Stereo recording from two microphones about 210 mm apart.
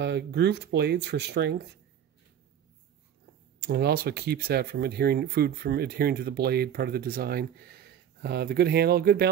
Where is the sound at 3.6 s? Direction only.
50° right (ahead or behind).